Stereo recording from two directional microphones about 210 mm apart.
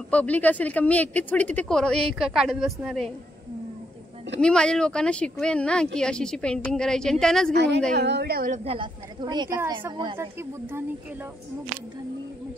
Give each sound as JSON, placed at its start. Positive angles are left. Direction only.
{"t": 0.1, "sound": "speech", "side_deg": 5}
{"t": 4.4, "sound": "a woman's voice", "side_deg": 5}
{"t": 7.5, "sound": "a woman's voice", "side_deg": -55}
{"t": 8.6, "sound": "a woman's voice", "side_deg": -25}